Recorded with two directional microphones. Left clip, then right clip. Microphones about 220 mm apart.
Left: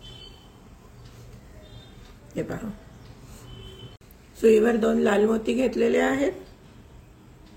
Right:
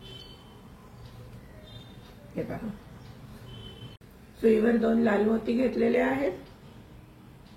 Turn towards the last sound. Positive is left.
turn(degrees=50)  # may be behind; listen again after turning